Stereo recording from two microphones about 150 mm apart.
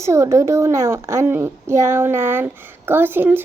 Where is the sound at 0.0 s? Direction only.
20° right (ahead or behind).